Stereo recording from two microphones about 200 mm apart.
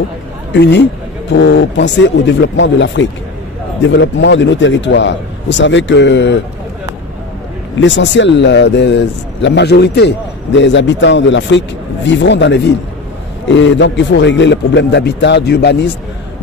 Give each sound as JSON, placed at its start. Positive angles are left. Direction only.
{"t": 0.5, "sound": "speech", "side_deg": 60}
{"t": 7.8, "sound": "speech", "side_deg": 65}